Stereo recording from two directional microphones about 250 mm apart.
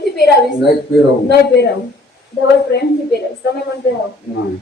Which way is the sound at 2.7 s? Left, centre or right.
Left.